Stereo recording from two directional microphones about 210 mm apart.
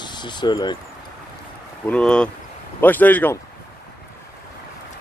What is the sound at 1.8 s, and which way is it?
Speech, 5° left (ahead or behind).